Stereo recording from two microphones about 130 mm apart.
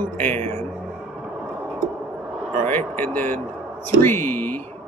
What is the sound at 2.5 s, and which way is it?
Speech, 15° left (ahead or behind).